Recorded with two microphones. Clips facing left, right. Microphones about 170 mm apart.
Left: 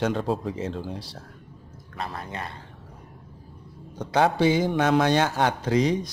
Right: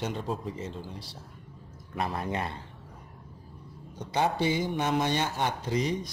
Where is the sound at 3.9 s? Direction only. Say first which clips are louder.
Left 6 dB; 85° left.